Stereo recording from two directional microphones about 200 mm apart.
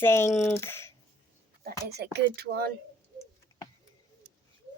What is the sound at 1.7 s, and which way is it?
Speech, 55° right (ahead or behind).